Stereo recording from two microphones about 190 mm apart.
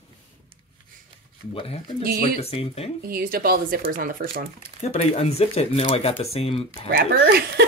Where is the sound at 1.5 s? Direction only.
30° left (ahead or behind).